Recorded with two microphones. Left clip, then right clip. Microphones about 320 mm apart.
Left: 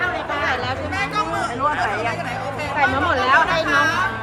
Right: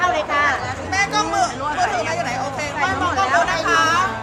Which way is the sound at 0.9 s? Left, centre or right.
Centre.